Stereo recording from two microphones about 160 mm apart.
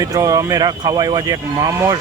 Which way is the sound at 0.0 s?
20° right (ahead or behind).